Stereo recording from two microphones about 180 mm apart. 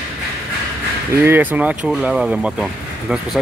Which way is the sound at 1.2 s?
10° right (ahead or behind).